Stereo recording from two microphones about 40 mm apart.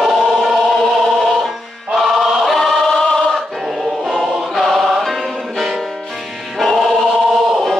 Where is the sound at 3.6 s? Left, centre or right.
Centre.